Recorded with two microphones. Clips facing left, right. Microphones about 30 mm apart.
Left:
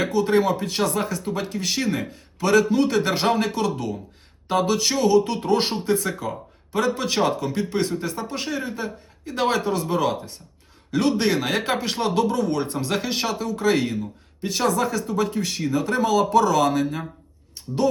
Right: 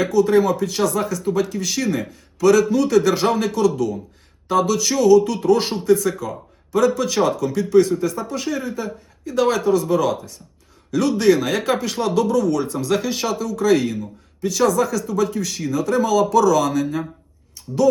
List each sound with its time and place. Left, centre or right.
0.0 s speech: left